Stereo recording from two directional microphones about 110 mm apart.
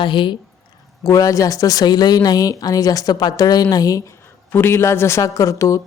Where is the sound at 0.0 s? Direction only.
45° left (ahead or behind).